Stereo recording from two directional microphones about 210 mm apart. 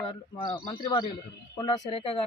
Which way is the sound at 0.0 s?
20° left (ahead or behind).